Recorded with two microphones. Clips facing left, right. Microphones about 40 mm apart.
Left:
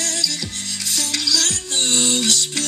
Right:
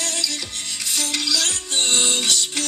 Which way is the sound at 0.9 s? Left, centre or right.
Right.